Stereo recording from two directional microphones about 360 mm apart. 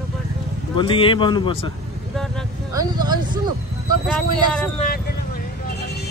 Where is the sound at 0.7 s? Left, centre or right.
Centre.